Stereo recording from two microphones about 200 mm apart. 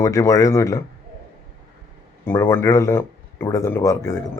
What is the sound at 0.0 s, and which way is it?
Speech, 15° left (ahead or behind).